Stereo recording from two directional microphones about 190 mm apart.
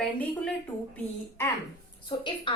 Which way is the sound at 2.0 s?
25° left (ahead or behind).